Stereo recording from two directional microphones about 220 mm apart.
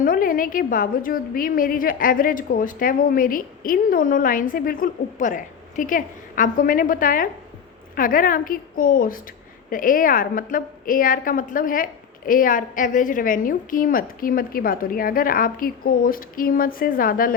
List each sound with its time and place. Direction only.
0.0 s a woman's voice: 40° left (ahead or behind)